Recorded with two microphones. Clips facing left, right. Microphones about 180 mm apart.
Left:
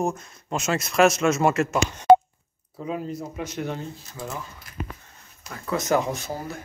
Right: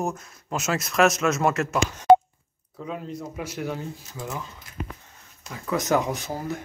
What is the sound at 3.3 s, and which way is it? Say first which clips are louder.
Speech: right 2 dB; 10° right (ahead or behind).